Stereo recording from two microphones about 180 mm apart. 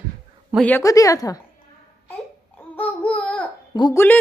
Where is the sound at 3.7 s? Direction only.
20° left (ahead or behind).